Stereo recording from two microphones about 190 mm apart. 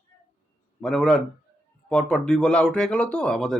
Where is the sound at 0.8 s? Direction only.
5° left (ahead or behind).